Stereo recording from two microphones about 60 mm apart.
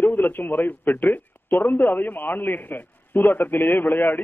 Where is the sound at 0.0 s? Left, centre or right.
Left.